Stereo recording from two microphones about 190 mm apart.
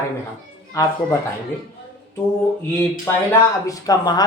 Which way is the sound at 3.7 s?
20° left (ahead or behind).